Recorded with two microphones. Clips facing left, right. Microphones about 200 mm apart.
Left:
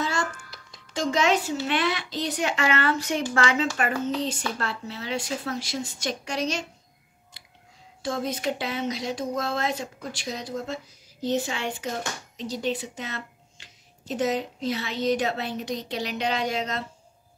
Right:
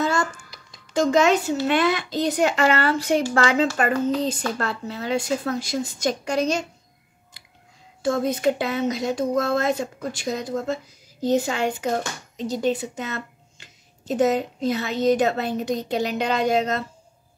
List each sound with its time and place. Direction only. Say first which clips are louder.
1.1 s a woman's voice: right 4 dB; 45° right (ahead or behind)
8.0 s speech: right 7 dB; 50° right (ahead or behind)